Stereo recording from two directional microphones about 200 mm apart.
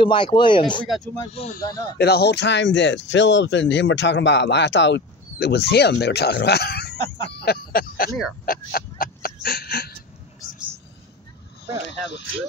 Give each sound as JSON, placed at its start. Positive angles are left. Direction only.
{"t": 0.0, "sound": "speech", "side_deg": 25}
{"t": 0.8, "sound": "speech", "side_deg": 0}
{"t": 1.3, "sound": "speech", "side_deg": 30}
{"t": 2.0, "sound": "speech", "side_deg": 55}
{"t": 7.3, "sound": "a sound", "side_deg": 50}